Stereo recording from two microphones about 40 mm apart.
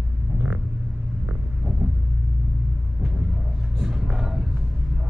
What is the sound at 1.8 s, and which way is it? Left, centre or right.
Rumble, right.